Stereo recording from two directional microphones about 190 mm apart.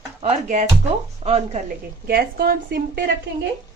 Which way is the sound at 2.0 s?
55° right (ahead or behind).